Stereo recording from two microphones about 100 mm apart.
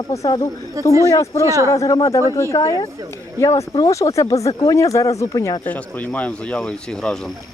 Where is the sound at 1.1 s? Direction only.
35° left (ahead or behind).